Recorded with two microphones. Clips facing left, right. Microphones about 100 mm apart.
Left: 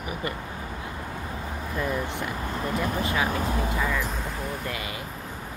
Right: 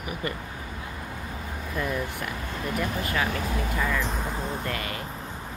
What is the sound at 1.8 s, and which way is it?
Speech, 20° left (ahead or behind).